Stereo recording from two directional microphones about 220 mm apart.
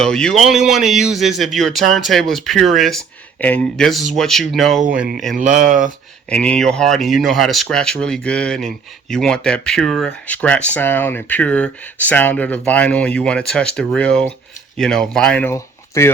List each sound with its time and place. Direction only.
0.0 s speech: 5° left (ahead or behind)
5.4 s speech: 35° right (ahead or behind)
6.3 s speech: 5° left (ahead or behind)